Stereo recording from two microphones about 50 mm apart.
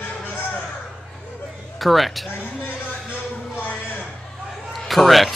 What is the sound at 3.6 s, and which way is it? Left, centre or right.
Music, left.